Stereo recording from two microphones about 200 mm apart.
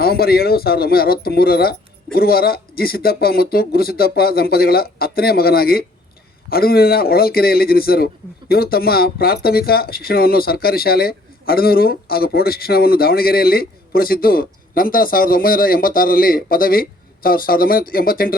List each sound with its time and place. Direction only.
0.0 s a man's voice: 50° left (ahead or behind)